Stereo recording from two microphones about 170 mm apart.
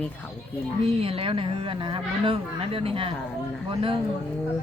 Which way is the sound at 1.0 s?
35° right (ahead or behind).